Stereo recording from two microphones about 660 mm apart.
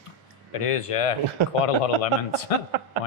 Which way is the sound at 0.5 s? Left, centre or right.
Left.